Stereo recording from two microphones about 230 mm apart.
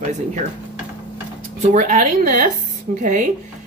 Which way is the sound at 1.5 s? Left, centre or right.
Right.